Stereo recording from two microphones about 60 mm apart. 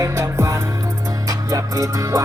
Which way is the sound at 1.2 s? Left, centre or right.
Right.